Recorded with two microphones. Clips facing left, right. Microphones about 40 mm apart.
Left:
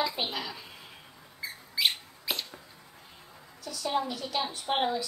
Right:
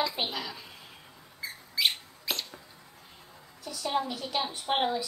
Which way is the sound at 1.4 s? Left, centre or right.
Centre.